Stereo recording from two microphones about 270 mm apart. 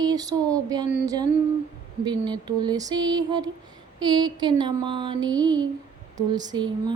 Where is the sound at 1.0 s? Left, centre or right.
Centre.